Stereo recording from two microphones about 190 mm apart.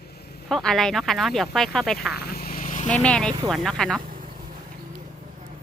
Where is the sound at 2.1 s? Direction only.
55° left (ahead or behind).